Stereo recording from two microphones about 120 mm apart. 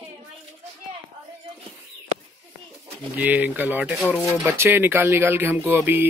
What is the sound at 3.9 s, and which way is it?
Speech, centre (ahead or behind).